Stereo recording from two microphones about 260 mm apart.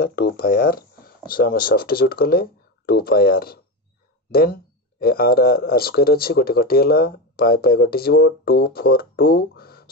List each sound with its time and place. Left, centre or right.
0.0 s speech: left